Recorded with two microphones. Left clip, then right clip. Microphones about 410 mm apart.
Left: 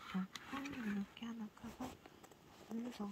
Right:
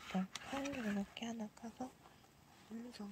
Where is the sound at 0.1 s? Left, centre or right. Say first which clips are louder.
Right 4 dB; centre.